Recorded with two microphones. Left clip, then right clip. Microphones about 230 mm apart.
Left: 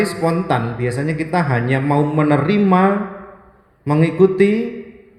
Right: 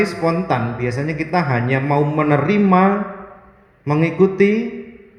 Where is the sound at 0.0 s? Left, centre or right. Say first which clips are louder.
Even; left.